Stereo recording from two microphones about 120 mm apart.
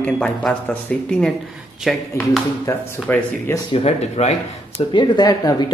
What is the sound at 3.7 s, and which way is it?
Speech, 60° left (ahead or behind).